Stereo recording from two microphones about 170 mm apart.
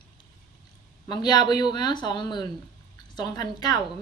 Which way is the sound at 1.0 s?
25° left (ahead or behind).